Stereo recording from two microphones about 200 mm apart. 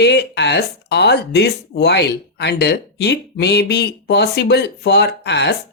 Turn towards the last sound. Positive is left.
turn(degrees=60)  # may be behind; listen again after turning